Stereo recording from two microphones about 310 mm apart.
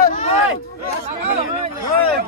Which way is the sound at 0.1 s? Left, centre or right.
Left.